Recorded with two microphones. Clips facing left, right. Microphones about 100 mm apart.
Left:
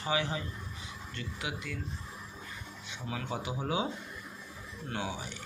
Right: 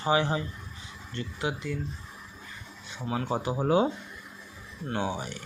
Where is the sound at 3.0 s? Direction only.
35° right (ahead or behind).